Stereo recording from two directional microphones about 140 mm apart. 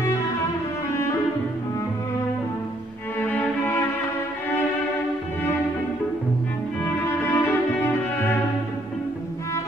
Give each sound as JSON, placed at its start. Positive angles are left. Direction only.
{"t": 3.2, "sound": "music", "side_deg": 10}
{"t": 6.8, "sound": "music", "side_deg": 15}